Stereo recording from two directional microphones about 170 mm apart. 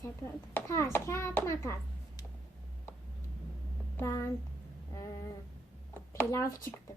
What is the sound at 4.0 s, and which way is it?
Speech, 15° left (ahead or behind).